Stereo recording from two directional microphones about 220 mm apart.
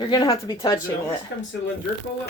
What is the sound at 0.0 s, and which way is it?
Speech, 20° left (ahead or behind).